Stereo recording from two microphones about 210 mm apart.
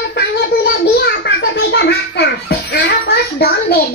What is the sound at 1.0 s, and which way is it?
A child's voice, 55° left (ahead or behind).